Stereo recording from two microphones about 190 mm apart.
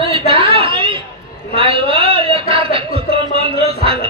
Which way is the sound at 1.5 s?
30° right (ahead or behind).